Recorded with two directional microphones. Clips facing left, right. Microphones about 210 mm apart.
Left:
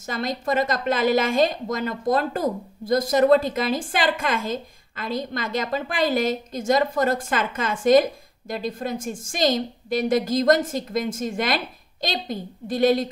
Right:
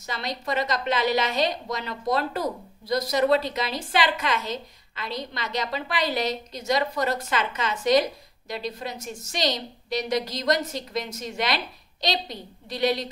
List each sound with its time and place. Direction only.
0.0 s a woman's voice: 50° left (ahead or behind)